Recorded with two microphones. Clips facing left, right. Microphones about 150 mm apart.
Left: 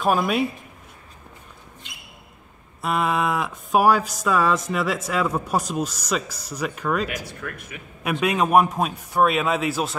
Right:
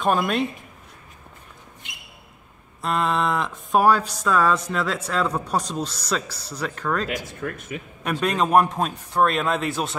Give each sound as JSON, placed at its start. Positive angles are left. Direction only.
{"t": 0.0, "sound": "speech", "side_deg": 5}
{"t": 2.8, "sound": "speech", "side_deg": 10}
{"t": 7.4, "sound": "speech", "side_deg": -30}
{"t": 8.0, "sound": "speech", "side_deg": 10}